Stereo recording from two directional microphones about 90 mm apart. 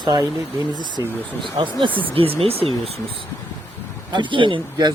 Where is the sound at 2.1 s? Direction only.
90° right.